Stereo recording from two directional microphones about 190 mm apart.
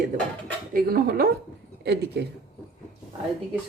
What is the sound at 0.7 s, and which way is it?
Speech, 50° right (ahead or behind).